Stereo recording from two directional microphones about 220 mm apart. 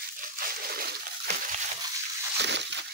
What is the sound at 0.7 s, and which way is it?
Splash, 40° right (ahead or behind).